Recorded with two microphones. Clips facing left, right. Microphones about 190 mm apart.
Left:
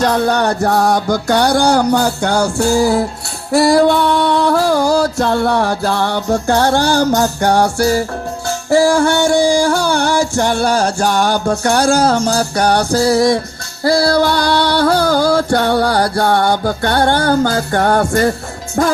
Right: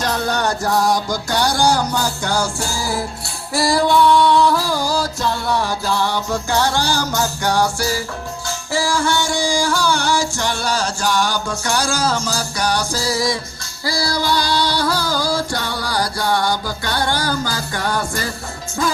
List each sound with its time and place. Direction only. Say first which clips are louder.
0.3 s music: left 5 dB; 60° left (ahead or behind)